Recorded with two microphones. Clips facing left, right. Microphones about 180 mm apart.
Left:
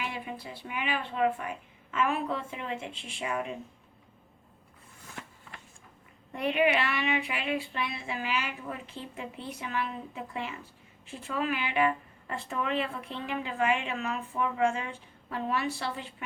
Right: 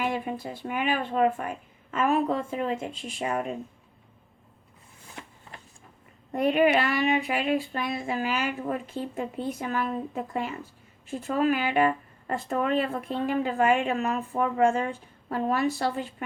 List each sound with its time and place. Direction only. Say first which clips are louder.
0.0 s speech: right 8 dB; 45° right (ahead or behind)
6.3 s speech: right 5 dB; 40° right (ahead or behind)